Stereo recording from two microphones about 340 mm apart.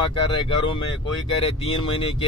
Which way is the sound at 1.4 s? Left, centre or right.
Centre.